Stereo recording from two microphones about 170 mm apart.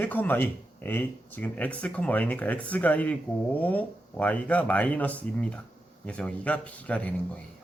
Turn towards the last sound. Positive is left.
turn(degrees=10)  # may be behind; listen again after turning